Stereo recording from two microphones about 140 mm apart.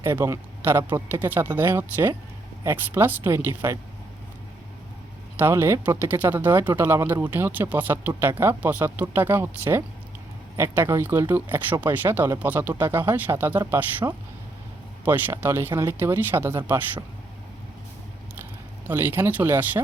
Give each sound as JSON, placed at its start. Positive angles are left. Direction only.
{"t": 0.0, "sound": "speech", "side_deg": -15}
{"t": 5.4, "sound": "speech", "side_deg": -15}
{"t": 15.0, "sound": "speech", "side_deg": -15}
{"t": 18.9, "sound": "speech", "side_deg": -15}